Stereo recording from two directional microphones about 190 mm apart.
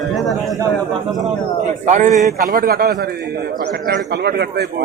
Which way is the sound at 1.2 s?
40° right (ahead or behind).